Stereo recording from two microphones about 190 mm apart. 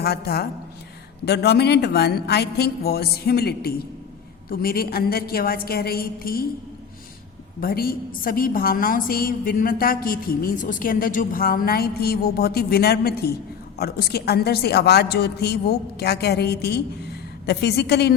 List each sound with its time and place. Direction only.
0.0 s a woman's voice: 55° left (ahead or behind)
7.6 s a woman's voice: 50° left (ahead or behind)